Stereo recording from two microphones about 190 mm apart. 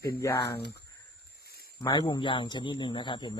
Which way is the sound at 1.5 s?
55° left (ahead or behind).